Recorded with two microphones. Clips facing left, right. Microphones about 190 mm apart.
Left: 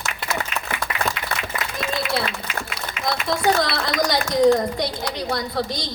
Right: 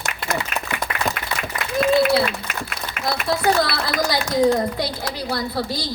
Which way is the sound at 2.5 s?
50° right (ahead or behind).